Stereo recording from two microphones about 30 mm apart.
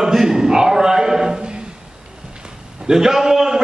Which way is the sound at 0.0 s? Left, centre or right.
Centre.